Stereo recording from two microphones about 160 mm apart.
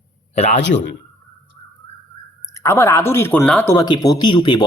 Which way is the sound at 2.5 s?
20° left (ahead or behind).